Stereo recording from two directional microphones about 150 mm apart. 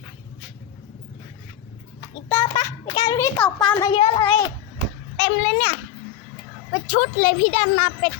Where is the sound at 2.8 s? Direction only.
30° left (ahead or behind).